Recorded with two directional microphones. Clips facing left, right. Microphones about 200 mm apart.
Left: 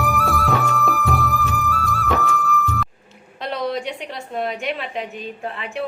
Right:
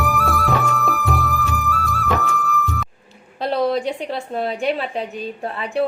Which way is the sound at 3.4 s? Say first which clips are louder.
Right 5 dB; 35° right (ahead or behind).